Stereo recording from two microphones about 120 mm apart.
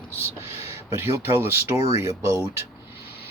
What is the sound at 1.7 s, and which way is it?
Speech, 55° left (ahead or behind).